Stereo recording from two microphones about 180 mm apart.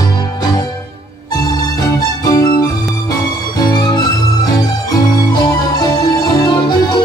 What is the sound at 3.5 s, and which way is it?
Music, 25° left (ahead or behind).